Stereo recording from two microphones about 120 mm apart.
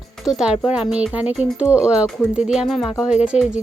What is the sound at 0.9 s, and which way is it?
A child's voice, 5° right (ahead or behind).